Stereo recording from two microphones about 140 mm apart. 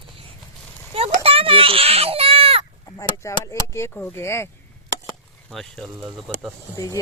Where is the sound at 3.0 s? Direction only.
20° left (ahead or behind).